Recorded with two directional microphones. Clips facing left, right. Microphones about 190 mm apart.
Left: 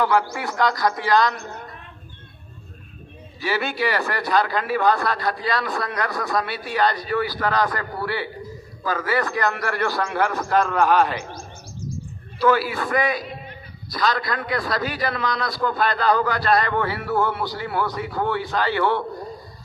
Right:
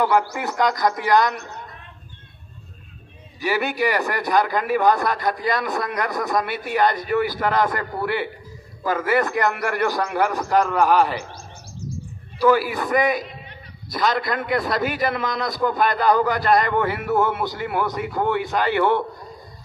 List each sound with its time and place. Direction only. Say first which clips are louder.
0.0 s a man's voice: right 1 dB; 15° right (ahead or behind)
3.4 s a man's voice: right 2 dB; 15° right (ahead or behind)
12.4 s a man's voice: right 2 dB; 15° right (ahead or behind)